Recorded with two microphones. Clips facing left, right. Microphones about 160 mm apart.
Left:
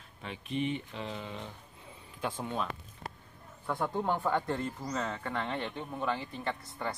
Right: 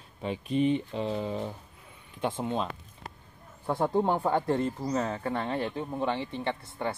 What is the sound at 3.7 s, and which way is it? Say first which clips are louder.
Speech: right 6 dB; 30° right (ahead or behind).